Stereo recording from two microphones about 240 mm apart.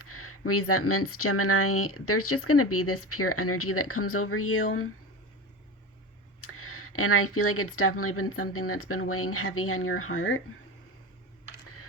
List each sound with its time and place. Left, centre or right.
0.0 s speech: left
6.4 s speech: left